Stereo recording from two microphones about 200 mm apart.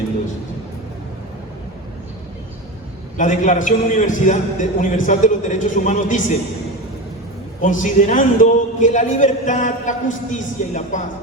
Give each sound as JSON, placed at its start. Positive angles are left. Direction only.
{"t": 3.2, "sound": "a man's voice", "side_deg": 40}
{"t": 7.6, "sound": "a man's voice", "side_deg": 40}